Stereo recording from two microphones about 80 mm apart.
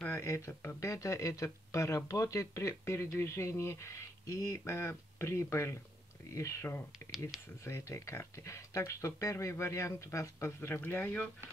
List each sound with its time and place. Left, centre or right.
0.1 s a sound: left
0.5 s speech: left
0.7 s speech: left